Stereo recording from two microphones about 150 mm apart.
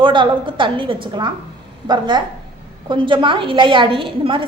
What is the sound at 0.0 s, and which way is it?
A woman's voice, 35° right (ahead or behind).